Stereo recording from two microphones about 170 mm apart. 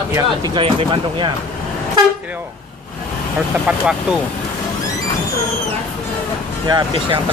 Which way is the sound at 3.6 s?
5° right (ahead or behind).